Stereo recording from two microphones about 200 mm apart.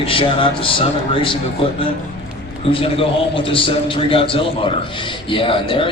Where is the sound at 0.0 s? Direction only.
25° left (ahead or behind).